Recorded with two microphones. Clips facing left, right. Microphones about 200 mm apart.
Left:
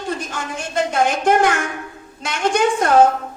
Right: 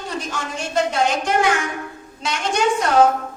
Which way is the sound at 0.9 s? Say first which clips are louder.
Left 3 dB; 55° left (ahead or behind).